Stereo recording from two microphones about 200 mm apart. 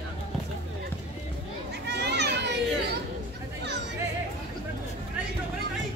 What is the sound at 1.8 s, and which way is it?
Children playing, 55° right (ahead or behind).